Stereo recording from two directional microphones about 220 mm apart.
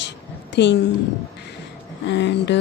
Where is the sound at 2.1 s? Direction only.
50° left (ahead or behind).